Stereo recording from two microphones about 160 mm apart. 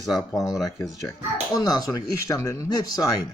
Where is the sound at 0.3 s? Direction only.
Centre (ahead or behind).